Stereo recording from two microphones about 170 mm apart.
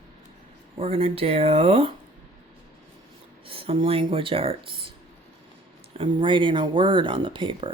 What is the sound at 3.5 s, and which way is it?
Speech, 35° right (ahead or behind).